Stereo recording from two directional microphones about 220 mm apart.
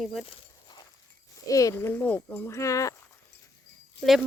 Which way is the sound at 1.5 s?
15° left (ahead or behind).